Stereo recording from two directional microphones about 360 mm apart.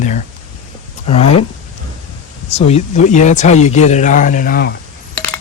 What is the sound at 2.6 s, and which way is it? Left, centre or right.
Speech, centre.